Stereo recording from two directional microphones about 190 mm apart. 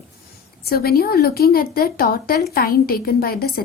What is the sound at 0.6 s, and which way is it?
A woman's voice, 55° left (ahead or behind).